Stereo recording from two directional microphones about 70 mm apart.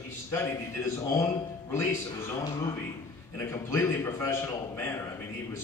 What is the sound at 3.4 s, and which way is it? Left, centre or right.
A man's voice, left.